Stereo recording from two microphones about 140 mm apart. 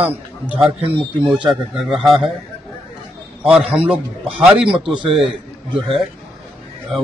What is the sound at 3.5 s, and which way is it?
A man's voice, 5° right (ahead or behind).